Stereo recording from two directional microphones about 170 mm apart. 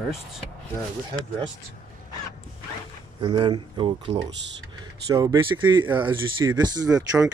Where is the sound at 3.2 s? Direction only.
30° right (ahead or behind).